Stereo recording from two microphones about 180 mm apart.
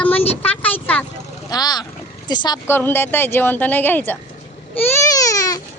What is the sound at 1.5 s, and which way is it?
Speech, 20° left (ahead or behind).